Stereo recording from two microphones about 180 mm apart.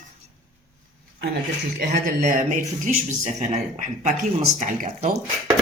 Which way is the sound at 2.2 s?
50° right (ahead or behind).